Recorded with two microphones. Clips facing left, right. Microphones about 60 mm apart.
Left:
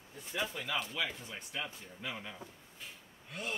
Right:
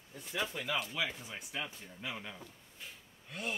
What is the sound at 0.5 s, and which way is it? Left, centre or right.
Speech, centre.